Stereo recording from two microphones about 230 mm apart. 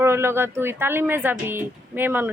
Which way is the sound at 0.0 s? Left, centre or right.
Centre.